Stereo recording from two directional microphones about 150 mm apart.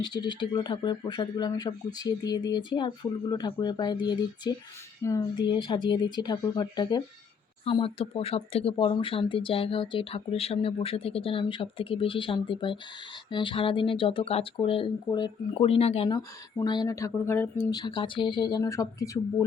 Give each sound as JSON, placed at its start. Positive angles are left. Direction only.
{"t": 0.0, "sound": "speech", "side_deg": 30}
{"t": 5.5, "sound": "speech", "side_deg": 30}
{"t": 7.6, "sound": "speech", "side_deg": 40}
{"t": 16.0, "sound": "speech", "side_deg": 25}